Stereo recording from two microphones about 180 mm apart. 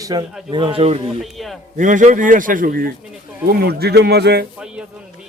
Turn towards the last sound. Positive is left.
turn(degrees=-65)  # may be behind; listen again after turning